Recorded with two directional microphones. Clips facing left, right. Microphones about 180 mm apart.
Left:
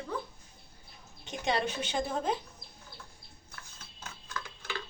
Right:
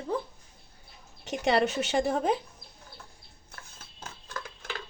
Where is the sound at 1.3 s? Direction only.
85° right.